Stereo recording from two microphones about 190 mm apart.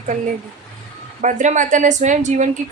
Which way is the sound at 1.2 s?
40° right (ahead or behind).